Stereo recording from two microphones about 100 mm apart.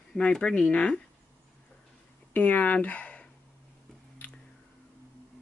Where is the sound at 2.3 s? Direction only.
15° left (ahead or behind).